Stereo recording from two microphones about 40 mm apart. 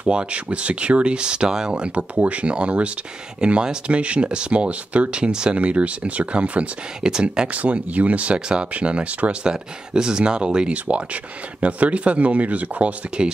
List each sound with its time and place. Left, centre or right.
0.0 s speech: right
2.1 s speech: right
5.2 s speech: right
7.0 s speech: centre
7.5 s speech: right
11.6 s speech: right